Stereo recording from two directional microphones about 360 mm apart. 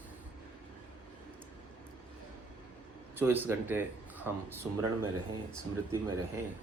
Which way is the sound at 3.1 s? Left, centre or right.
Centre.